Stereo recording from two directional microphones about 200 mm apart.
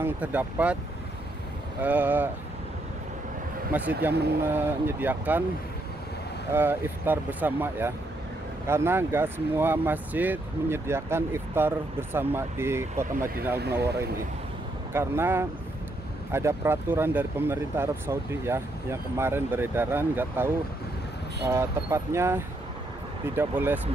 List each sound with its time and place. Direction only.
0.0 s speech: 10° right (ahead or behind)
1.8 s speech: 10° right (ahead or behind)
3.7 s speech: 5° right (ahead or behind)
4.1 s speech: 55° right (ahead or behind)
4.5 s speech: 10° right (ahead or behind)
6.5 s speech: 10° right (ahead or behind)
13.6 s speech: 55° right (ahead or behind)
14.9 s speech: 10° right (ahead or behind)